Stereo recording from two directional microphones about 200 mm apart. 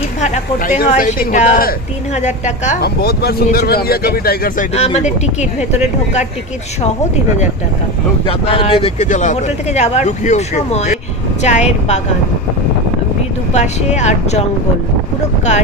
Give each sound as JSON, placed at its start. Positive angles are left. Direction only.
{"t": 0.2, "sound": "a woman's voice", "side_deg": 40}
{"t": 2.8, "sound": "speech", "side_deg": 50}
{"t": 4.7, "sound": "speech", "side_deg": 35}
{"t": 8.3, "sound": "speech", "side_deg": 25}
{"t": 13.5, "sound": "speech", "side_deg": 35}